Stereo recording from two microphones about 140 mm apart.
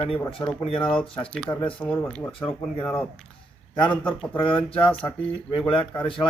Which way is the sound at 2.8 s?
10° left (ahead or behind).